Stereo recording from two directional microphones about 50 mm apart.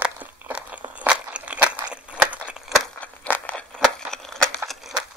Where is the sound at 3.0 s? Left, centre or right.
Left.